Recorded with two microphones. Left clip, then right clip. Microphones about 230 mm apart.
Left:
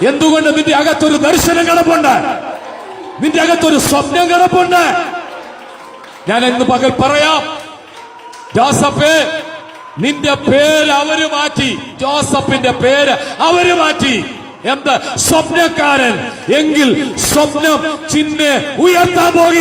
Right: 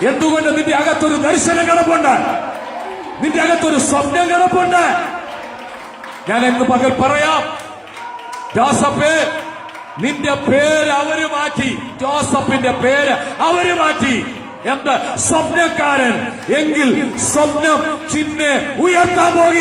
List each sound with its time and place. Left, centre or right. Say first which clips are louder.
0.0 s a man's voice: left 4 dB; left
6.2 s a man's voice: left 3 dB; left
8.5 s a man's voice: left 3 dB; left